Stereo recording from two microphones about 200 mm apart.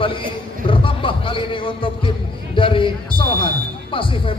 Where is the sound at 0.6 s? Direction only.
25° left (ahead or behind).